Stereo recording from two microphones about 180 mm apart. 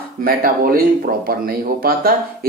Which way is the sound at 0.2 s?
55° right (ahead or behind).